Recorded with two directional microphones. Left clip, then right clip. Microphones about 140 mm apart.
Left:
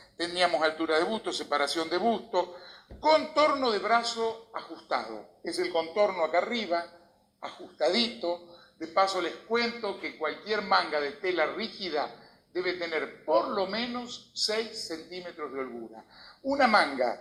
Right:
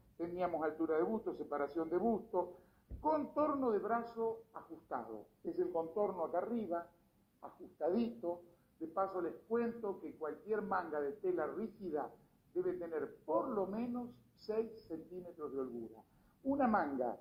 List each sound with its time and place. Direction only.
0.2 s a man's voice: 40° left (ahead or behind)